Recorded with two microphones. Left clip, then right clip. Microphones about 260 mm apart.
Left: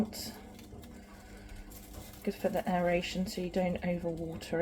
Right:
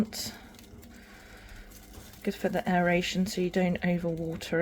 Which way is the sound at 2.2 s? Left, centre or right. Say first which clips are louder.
Right 3 dB; right.